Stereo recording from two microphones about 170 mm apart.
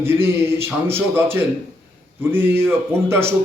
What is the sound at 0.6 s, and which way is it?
A man's voice, 15° right (ahead or behind).